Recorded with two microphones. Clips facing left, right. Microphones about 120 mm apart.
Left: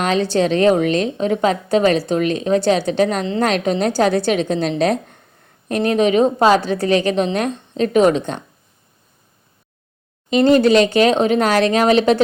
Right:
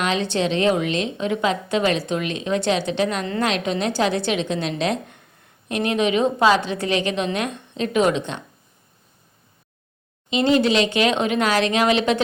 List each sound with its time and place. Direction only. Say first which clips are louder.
0.0 s a woman's voice: left 5 dB; 40° left (ahead or behind)
10.2 s a woman's voice: left 6 dB; 45° left (ahead or behind)